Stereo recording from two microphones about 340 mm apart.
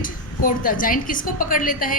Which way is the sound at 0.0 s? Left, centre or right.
Left.